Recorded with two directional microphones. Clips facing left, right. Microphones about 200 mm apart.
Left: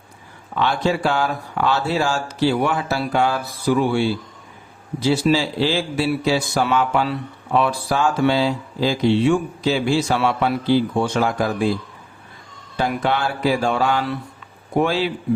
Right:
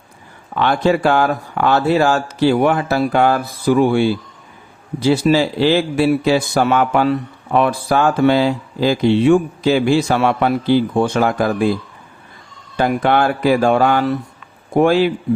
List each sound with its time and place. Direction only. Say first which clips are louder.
0.5 s a man's voice: right 5 dB; 55° right (ahead or behind)
12.7 s a man's voice: right 6 dB; 55° right (ahead or behind)